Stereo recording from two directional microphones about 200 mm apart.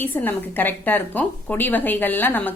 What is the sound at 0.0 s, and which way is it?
A woman's voice, 10° left (ahead or behind).